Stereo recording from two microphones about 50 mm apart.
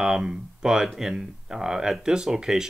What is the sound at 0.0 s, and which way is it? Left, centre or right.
Speech, centre.